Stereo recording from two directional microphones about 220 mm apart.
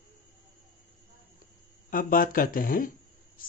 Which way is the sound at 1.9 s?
40° left (ahead or behind).